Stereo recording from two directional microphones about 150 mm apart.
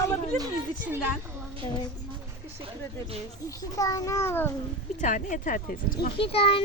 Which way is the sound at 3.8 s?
20° left (ahead or behind).